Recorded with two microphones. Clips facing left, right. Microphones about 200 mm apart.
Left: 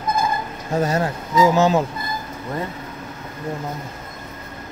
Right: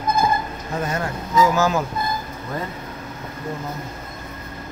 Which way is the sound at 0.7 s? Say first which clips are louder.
Left 5 dB; 35° left (ahead or behind).